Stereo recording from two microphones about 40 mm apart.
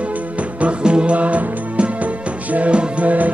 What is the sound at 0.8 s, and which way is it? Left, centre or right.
Music, right.